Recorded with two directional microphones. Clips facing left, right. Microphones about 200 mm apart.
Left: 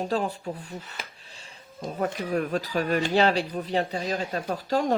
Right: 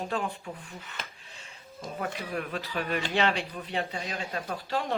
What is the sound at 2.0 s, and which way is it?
Speech, 40° left (ahead or behind).